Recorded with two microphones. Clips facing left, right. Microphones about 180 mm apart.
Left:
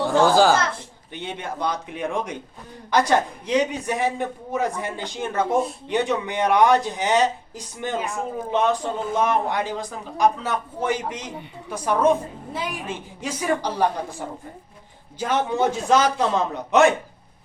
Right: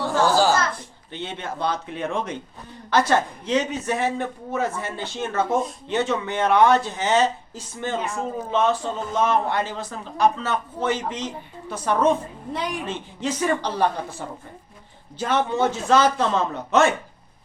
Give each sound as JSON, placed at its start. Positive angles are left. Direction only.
{"t": 0.1, "sound": "a woman's voice", "side_deg": 55}
{"t": 1.1, "sound": "speech", "side_deg": 15}